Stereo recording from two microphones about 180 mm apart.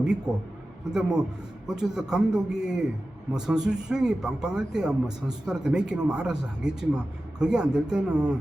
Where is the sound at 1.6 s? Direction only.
5° right (ahead or behind).